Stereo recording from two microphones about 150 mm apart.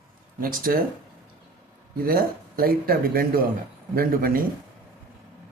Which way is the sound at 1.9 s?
75° right (ahead or behind).